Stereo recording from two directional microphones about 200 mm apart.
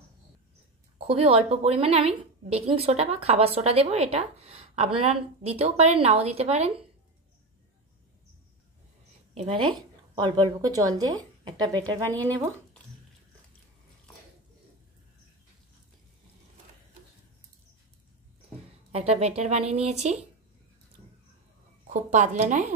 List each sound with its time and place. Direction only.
0.9 s a woman's voice: 30° right (ahead or behind)
9.3 s a woman's voice: 30° right (ahead or behind)
12.1 s speech: 10° left (ahead or behind)
18.9 s a woman's voice: 30° right (ahead or behind)
21.8 s a woman's voice: 40° right (ahead or behind)